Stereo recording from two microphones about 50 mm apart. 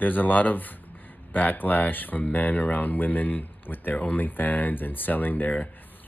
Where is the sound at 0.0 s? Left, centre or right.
Left.